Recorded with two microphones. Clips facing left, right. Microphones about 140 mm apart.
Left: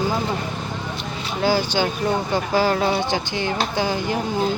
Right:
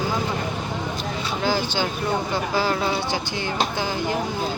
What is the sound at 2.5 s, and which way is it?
Speech, 40° left (ahead or behind).